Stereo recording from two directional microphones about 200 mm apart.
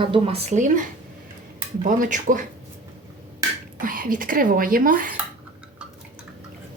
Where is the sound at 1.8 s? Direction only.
40° right (ahead or behind).